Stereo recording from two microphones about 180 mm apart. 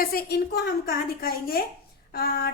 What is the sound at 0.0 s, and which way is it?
A woman's voice, 55° left (ahead or behind).